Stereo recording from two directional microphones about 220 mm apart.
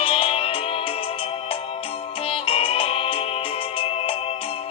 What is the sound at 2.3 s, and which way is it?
Music, 25° left (ahead or behind).